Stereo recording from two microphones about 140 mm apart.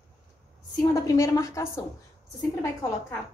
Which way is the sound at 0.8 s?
20° left (ahead or behind).